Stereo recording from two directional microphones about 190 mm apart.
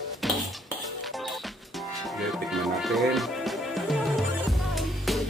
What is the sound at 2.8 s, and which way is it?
Music, centre (ahead or behind).